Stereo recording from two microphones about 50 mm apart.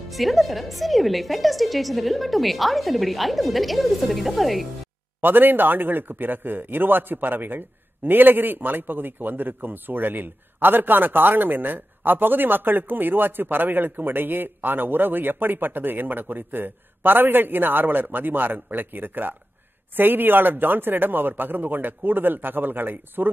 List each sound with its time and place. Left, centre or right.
0.1 s a woman's voice: centre
5.2 s speech: right